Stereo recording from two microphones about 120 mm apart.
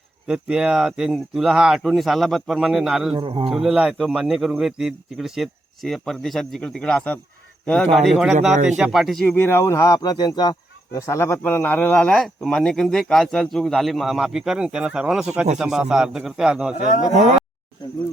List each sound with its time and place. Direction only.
0.3 s speech: 10° right (ahead or behind)
3.2 s speech: 45° right (ahead or behind)
3.5 s speech: 5° right (ahead or behind)
9.2 s speech: 15° left (ahead or behind); by 16.7 s 5° right (ahead or behind)
17.1 s speech: 90° right